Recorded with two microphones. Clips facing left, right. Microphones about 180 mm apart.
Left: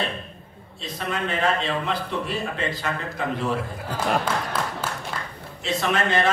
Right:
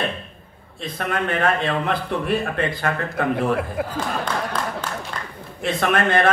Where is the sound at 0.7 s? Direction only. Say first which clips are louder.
Right 4 dB; 55° right (ahead or behind).